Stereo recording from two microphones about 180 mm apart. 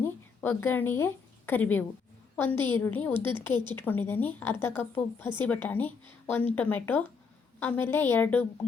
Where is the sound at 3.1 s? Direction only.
25° right (ahead or behind).